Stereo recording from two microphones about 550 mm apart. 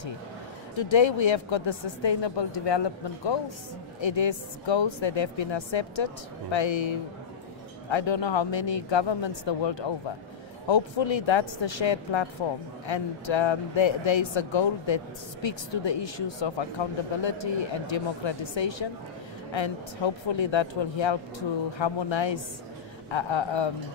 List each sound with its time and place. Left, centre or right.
0.7 s speech: left